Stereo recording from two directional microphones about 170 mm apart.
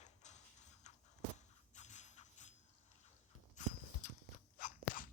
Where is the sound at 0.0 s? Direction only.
45° left (ahead or behind).